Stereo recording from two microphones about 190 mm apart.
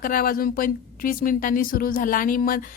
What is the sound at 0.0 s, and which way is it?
Speech, 45° left (ahead or behind).